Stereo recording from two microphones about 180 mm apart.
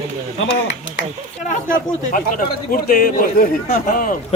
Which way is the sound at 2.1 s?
50° left (ahead or behind).